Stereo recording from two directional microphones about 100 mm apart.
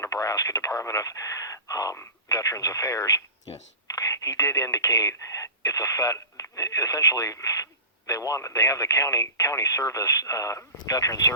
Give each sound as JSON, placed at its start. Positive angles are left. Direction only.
{"t": 0.0, "sound": "radio", "side_deg": 35}
{"t": 3.9, "sound": "speech", "side_deg": 35}